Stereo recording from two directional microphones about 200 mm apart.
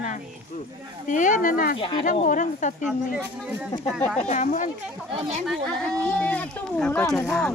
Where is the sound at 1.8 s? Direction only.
25° left (ahead or behind).